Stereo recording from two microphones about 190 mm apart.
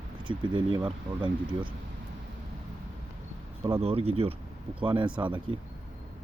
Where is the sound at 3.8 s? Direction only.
30° right (ahead or behind).